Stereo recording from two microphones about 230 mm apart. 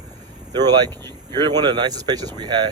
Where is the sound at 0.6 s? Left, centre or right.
Centre.